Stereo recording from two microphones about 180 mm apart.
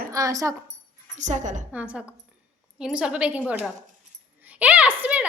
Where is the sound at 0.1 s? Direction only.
20° right (ahead or behind).